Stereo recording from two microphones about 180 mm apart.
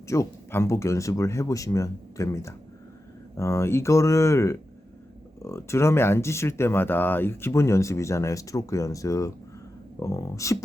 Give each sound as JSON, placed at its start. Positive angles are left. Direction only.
{"t": 0.1, "sound": "speech", "side_deg": 15}